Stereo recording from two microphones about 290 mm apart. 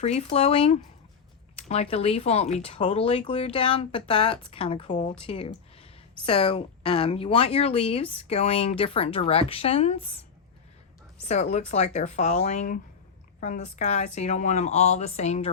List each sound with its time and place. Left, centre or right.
0.0 s speech: left
11.3 s speech: left